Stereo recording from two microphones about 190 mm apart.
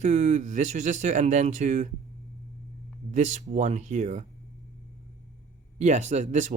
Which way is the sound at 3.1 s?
35° right (ahead or behind).